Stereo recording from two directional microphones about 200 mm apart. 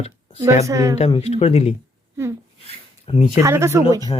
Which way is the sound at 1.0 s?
30° left (ahead or behind).